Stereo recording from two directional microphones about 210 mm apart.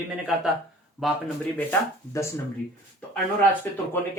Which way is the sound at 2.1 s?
15° left (ahead or behind).